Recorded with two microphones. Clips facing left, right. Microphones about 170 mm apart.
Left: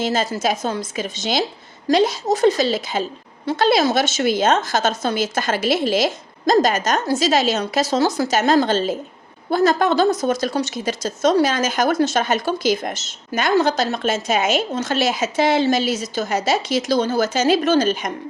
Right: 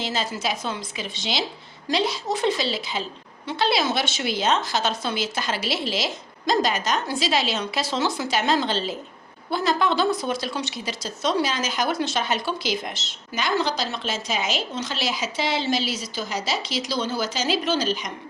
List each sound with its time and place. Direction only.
0.0 s a woman's voice: 45° left (ahead or behind)